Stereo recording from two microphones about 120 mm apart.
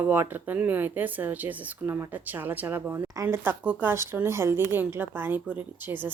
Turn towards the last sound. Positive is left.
turn(degrees=-15)  # may be behind; listen again after turning